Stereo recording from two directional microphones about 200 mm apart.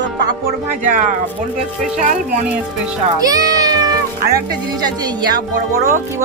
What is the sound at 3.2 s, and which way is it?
Music, 20° right (ahead or behind).